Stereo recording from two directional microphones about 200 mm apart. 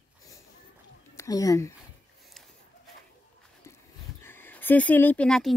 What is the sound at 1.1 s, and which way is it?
Speech, 15° left (ahead or behind).